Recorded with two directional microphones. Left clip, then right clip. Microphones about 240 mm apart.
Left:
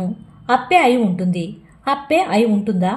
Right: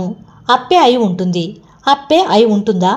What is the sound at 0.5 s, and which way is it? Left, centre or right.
A woman's voice, right.